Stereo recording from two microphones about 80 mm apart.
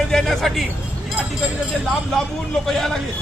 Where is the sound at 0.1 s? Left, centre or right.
Centre.